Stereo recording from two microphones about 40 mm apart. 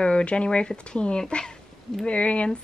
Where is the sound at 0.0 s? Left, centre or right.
Left.